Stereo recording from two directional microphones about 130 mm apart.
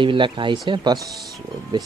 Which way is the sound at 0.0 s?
40° right (ahead or behind).